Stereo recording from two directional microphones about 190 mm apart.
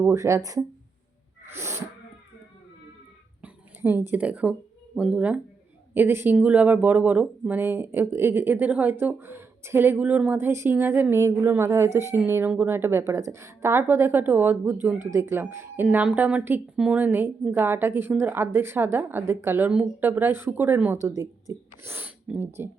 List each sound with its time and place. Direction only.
0.0 s speech: 15° right (ahead or behind)
1.5 s sneeze: 15° right (ahead or behind)
3.4 s speech: 10° right (ahead or behind)